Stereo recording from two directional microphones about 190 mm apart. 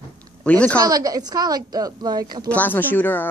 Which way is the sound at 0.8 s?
20° right (ahead or behind).